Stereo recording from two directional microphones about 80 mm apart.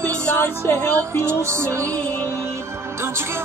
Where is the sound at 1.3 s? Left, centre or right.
Right.